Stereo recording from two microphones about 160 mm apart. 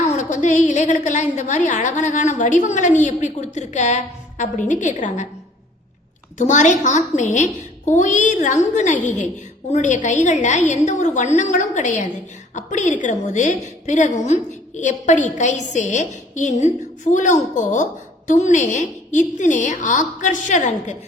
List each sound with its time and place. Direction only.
0.1 s a woman's voice: 50° left (ahead or behind)
6.3 s a woman's voice: 50° left (ahead or behind)